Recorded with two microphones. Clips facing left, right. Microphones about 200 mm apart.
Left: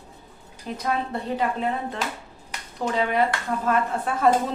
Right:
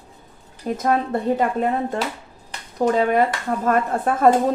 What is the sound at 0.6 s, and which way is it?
Speech, 45° right (ahead or behind).